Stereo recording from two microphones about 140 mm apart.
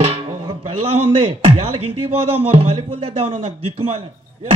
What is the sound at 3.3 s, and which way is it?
Speech, 45° right (ahead or behind).